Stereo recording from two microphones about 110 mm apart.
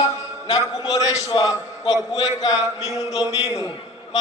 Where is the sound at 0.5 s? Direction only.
35° left (ahead or behind).